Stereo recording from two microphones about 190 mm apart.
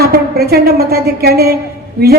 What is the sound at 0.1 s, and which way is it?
A woman's voice, 55° right (ahead or behind).